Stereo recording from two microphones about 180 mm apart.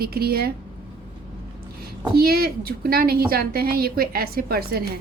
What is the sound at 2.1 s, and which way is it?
A woman's voice, 60° right (ahead or behind).